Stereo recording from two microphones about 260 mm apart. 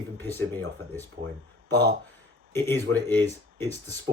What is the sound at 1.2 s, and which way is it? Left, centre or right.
Speech, right.